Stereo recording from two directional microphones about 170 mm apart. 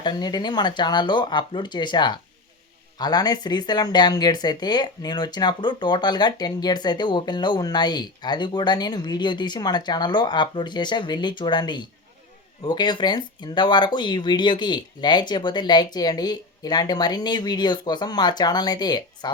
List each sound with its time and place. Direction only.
0.0 s speech: 25° left (ahead or behind)